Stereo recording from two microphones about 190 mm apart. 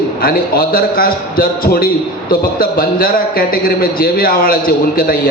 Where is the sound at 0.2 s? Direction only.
50° left (ahead or behind).